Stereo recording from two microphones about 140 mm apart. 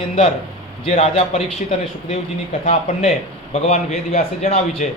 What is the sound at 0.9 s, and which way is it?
Speech, 45° left (ahead or behind).